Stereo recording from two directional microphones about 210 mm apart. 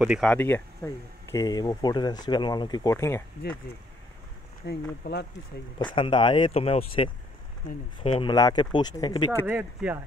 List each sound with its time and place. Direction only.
0.0 s speech: centre (ahead or behind)
4.6 s speech: 55° left (ahead or behind)
5.9 s speech: 20° left (ahead or behind)
9.5 s speech: 5° right (ahead or behind)